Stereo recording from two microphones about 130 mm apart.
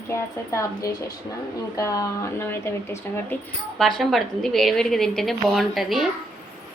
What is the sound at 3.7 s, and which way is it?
A woman's voice, 5° left (ahead or behind).